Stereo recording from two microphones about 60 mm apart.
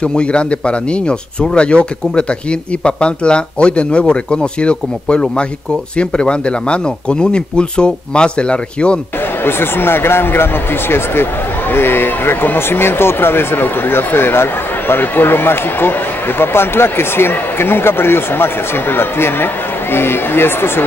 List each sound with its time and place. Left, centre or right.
0.0 s speech: centre
9.4 s speech: left